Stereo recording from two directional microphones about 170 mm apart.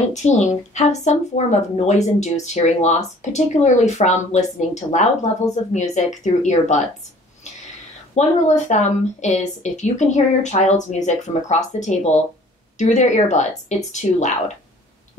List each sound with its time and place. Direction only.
0.1 s speech: 45° left (ahead or behind)
8.1 s a woman's voice: 45° left (ahead or behind)